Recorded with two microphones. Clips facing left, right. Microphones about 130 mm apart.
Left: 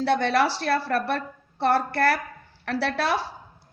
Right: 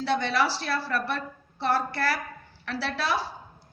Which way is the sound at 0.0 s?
55° left (ahead or behind).